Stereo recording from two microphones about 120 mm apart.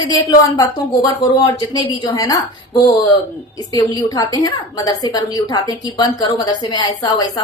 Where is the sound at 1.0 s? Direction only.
30° left (ahead or behind).